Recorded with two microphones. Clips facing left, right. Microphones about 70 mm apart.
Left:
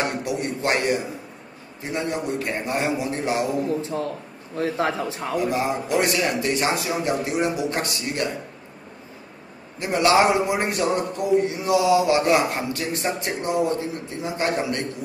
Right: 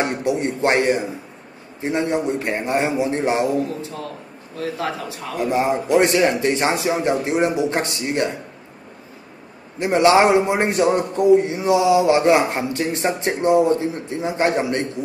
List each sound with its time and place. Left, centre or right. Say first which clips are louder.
0.0 s a sound: right 5 dB; right
1.8 s a man's voice: right 6 dB; right
3.5 s a man's voice: even; left
5.4 s a man's voice: right 6 dB; right
9.8 s a man's voice: right 4 dB; right